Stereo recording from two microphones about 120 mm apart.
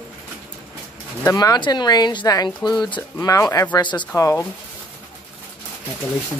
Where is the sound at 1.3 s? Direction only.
35° left (ahead or behind).